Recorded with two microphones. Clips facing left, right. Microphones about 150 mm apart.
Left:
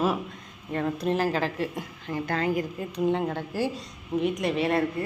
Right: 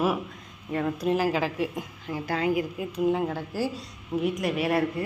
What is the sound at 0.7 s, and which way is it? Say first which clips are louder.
A woman's voice: right 1 dB; 10° right (ahead or behind).